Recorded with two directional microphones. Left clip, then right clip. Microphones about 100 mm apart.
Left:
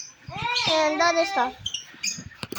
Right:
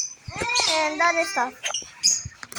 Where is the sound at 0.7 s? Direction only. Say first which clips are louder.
Left 1 dB; 55° left (ahead or behind).